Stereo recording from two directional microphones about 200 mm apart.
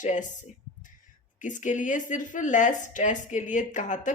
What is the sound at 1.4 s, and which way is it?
Speech, 40° left (ahead or behind).